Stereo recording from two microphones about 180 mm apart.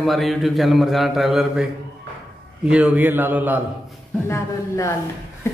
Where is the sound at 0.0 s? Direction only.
Centre (ahead or behind).